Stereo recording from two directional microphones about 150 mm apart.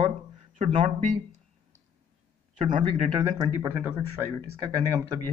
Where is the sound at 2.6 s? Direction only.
50° right (ahead or behind).